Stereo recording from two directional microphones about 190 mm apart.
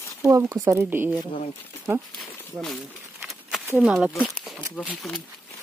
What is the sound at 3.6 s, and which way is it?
Speech, 5° right (ahead or behind).